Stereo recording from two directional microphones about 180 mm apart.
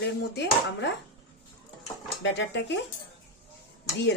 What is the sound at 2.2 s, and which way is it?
Speech, 80° left.